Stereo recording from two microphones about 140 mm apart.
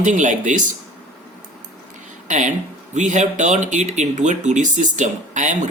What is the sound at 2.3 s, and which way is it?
Speech, 60° right (ahead or behind).